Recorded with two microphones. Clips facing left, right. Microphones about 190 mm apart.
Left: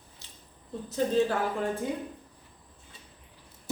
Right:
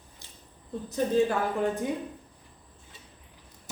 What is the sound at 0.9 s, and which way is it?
Speech, 15° right (ahead or behind).